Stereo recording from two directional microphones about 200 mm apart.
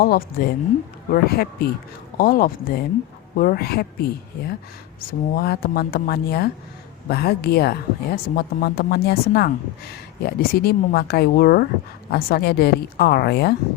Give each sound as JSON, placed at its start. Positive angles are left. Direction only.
{"t": 0.0, "sound": "a woman's voice", "side_deg": 50}